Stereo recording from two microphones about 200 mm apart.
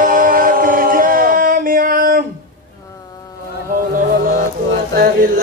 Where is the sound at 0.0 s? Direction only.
45° right (ahead or behind).